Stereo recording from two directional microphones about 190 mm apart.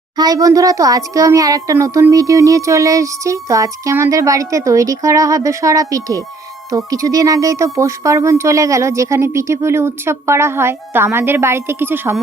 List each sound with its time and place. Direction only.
0.2 s a child's voice: 20° right (ahead or behind)